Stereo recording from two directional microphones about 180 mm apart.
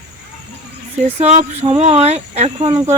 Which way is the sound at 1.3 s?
35° right (ahead or behind).